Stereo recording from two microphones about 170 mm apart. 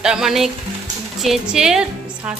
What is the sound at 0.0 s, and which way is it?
A woman's voice, 5° right (ahead or behind).